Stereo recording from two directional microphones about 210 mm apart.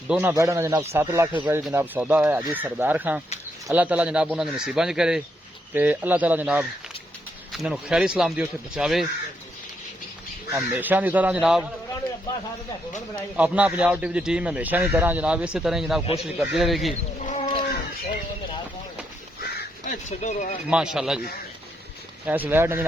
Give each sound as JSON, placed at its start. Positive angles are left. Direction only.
{"t": 0.1, "sound": "a man's voice", "side_deg": -10}
{"t": 10.5, "sound": "speech", "side_deg": -10}
{"t": 13.3, "sound": "a man's voice", "side_deg": -5}
{"t": 17.2, "sound": "a sound", "side_deg": 30}
{"t": 19.5, "sound": "speech", "side_deg": 35}
{"t": 20.7, "sound": "a man's voice", "side_deg": -5}
{"t": 22.3, "sound": "speech", "side_deg": -10}